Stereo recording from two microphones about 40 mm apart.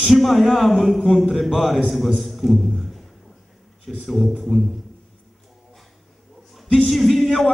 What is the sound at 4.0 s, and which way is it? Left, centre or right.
Speech, centre.